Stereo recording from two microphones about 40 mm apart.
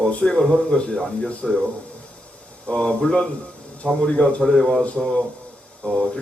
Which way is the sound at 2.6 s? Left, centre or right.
Left.